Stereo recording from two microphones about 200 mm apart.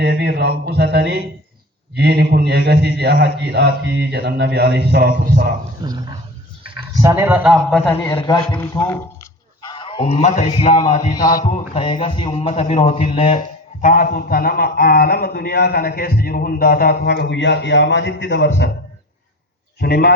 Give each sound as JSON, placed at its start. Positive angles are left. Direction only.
{"t": 0.0, "sound": "a man's voice", "side_deg": -55}
{"t": 5.8, "sound": "speech", "side_deg": -20}
{"t": 7.5, "sound": "a man's voice", "side_deg": 5}
{"t": 8.1, "sound": "a man's voice", "side_deg": 20}
{"t": 9.6, "sound": "a sound", "side_deg": 25}
{"t": 10.5, "sound": "a man's voice", "side_deg": 25}
{"t": 11.2, "sound": "a man's voice", "side_deg": 45}
{"t": 11.4, "sound": "a man's voice", "side_deg": 30}
{"t": 13.8, "sound": "a man's voice", "side_deg": 45}
{"t": 19.8, "sound": "a man's voice", "side_deg": 55}